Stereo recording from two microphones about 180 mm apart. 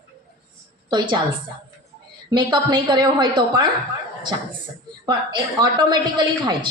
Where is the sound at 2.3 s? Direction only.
25° right (ahead or behind).